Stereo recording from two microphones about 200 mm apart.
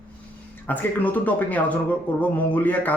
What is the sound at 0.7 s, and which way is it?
Speech, 10° left (ahead or behind).